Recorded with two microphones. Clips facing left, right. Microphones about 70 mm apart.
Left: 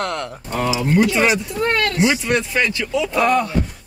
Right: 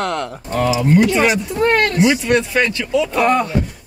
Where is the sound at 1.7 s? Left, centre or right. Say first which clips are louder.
Right 3 dB; right.